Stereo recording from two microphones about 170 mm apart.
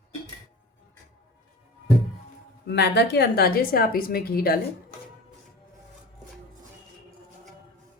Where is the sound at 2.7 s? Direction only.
75° left (ahead or behind); by 4.5 s 60° left (ahead or behind).